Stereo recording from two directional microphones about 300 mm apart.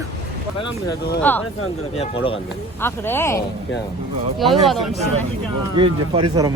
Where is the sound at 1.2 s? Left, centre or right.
Centre.